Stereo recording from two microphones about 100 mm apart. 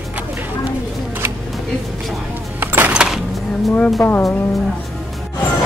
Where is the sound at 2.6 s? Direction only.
20° right (ahead or behind).